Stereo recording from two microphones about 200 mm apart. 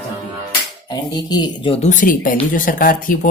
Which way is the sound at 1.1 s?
20° left (ahead or behind).